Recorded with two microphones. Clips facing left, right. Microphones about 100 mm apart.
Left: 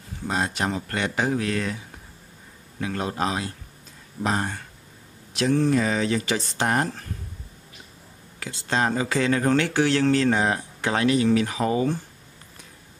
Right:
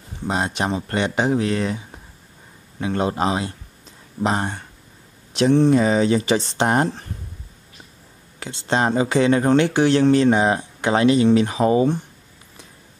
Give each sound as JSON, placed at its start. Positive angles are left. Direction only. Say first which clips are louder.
{"t": 0.2, "sound": "speech", "louder": "right 3 dB", "side_deg": -20}
{"t": 2.8, "sound": "speech", "louder": "right 5 dB", "side_deg": -25}
{"t": 8.4, "sound": "speech", "louder": "right 4 dB", "side_deg": -25}